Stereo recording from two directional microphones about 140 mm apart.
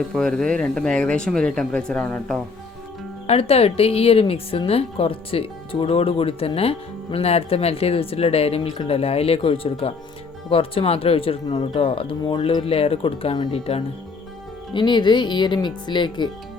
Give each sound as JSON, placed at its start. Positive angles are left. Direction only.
{"t": 0.1, "sound": "speech", "side_deg": 5}
{"t": 3.2, "sound": "a woman's voice", "side_deg": 45}
{"t": 14.7, "sound": "speech", "side_deg": 35}